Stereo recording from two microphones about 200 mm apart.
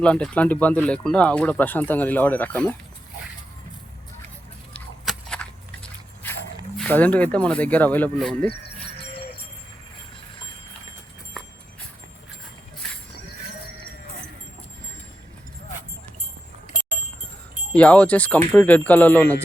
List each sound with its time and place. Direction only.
0.0 s speech: 5° left (ahead or behind)
4.7 s biting: 5° left (ahead or behind)
6.7 s speech: 5° left (ahead or behind)
17.7 s speech: 5° left (ahead or behind)